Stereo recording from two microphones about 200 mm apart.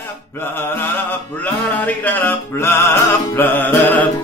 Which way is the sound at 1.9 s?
10° left (ahead or behind).